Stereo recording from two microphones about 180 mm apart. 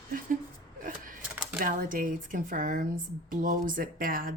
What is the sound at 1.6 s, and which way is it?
Speech, 50° right (ahead or behind).